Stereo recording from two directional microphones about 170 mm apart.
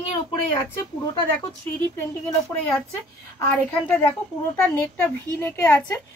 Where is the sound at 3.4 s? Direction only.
10° left (ahead or behind).